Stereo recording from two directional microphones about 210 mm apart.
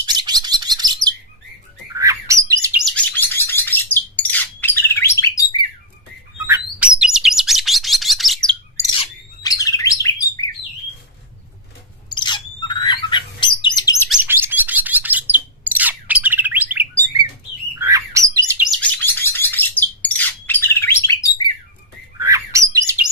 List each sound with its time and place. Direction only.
0.0 s bird: 20° right (ahead or behind)
3.0 s bird: 10° left (ahead or behind)
6.4 s bird: 10° right (ahead or behind)
8.9 s bird: 15° left (ahead or behind)
12.1 s bird: 20° left (ahead or behind)
14.1 s chirp: 10° right (ahead or behind)
17.7 s bird: 15° right (ahead or behind)
18.8 s bird: 10° left (ahead or behind)
22.2 s bird: 15° right (ahead or behind)